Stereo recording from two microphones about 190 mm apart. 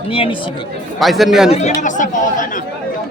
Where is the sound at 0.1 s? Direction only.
30° left (ahead or behind).